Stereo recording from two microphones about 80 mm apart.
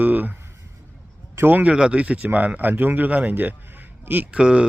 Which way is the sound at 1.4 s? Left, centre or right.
Right.